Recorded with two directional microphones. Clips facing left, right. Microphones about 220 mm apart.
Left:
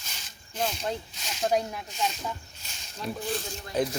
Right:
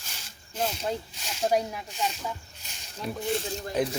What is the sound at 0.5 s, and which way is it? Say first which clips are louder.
Speech: right 1 dB; 5° right (ahead or behind).